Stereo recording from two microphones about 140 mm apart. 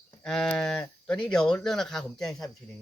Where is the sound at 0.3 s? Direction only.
5° left (ahead or behind).